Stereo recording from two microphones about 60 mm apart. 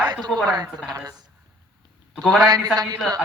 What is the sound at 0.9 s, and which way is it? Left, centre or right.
Speech, right.